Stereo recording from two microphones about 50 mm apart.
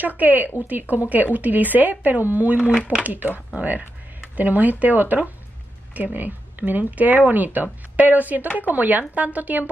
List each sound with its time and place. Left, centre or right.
0.0 s speech: right